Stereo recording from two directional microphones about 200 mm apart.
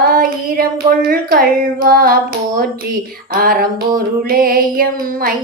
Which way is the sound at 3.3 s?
45° right (ahead or behind).